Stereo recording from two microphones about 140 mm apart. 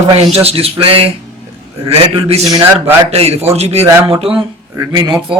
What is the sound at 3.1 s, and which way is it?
Speech, 45° right (ahead or behind).